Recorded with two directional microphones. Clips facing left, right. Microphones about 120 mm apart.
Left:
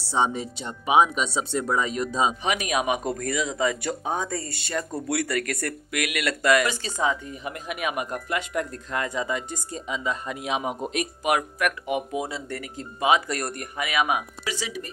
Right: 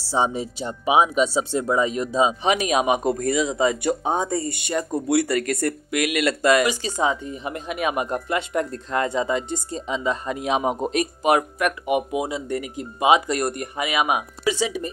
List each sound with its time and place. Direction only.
0.0 s speech: 5° right (ahead or behind)
2.4 s speech: 25° right (ahead or behind)